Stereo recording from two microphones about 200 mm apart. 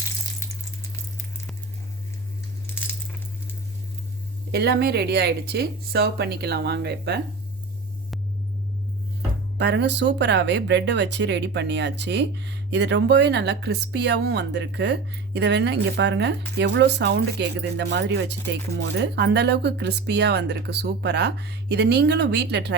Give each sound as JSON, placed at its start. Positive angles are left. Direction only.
{"t": 4.5, "sound": "speech", "side_deg": -55}
{"t": 9.6, "sound": "speech", "side_deg": -60}